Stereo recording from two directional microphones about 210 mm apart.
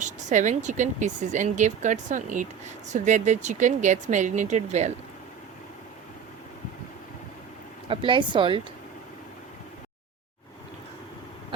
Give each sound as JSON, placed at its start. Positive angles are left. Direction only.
{"t": 0.0, "sound": "speech", "side_deg": -35}
{"t": 7.9, "sound": "speech", "side_deg": -25}